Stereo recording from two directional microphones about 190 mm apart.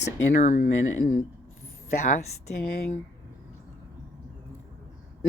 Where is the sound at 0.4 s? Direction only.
40° left (ahead or behind).